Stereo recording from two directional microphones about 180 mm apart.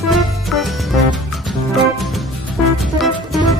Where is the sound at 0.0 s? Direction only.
Centre (ahead or behind).